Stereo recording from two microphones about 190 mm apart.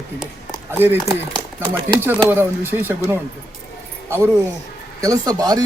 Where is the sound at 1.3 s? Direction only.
25° right (ahead or behind).